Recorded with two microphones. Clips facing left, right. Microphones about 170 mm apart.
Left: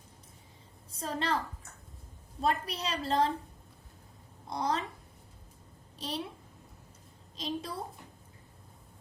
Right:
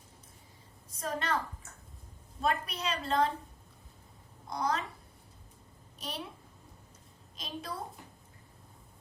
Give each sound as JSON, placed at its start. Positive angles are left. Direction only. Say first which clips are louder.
{"t": 0.9, "sound": "a woman's voice", "louder": "left 1 dB", "side_deg": 30}
{"t": 2.4, "sound": "a woman's voice", "louder": "left 1 dB", "side_deg": 35}
{"t": 4.4, "sound": "a woman's voice", "louder": "left 1 dB", "side_deg": 30}
{"t": 6.0, "sound": "a child's voice", "louder": "left 4 dB", "side_deg": 30}
{"t": 7.3, "sound": "a woman's voice", "louder": "left 6 dB", "side_deg": 25}